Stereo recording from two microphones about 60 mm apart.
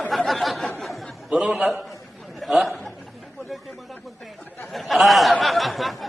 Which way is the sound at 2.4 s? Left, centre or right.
Centre.